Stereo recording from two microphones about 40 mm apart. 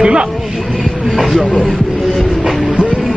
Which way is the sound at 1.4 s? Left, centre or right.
Left.